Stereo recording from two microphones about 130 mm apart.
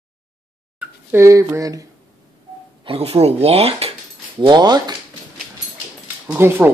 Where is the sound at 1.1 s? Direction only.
20° right (ahead or behind).